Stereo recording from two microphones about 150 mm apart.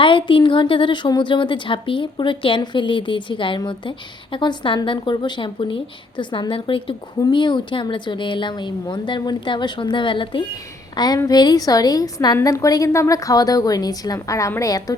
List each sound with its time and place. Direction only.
0.0 s a woman's voice: 35° left (ahead or behind)